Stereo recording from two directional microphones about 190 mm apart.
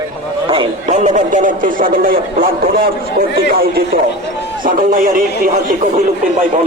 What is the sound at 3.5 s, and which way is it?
A man's voice, 50° right (ahead or behind).